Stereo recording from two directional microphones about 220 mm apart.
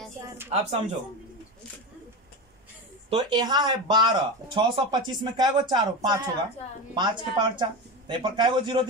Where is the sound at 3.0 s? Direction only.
20° right (ahead or behind).